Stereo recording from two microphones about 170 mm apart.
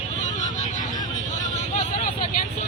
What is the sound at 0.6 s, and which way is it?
Vehicle, 45° left (ahead or behind).